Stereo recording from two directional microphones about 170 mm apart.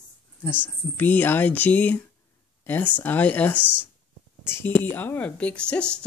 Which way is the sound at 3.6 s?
10° right (ahead or behind).